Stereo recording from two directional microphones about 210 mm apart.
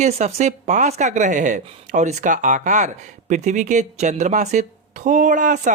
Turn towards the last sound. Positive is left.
turn(degrees=-40)  # may be behind; listen again after turning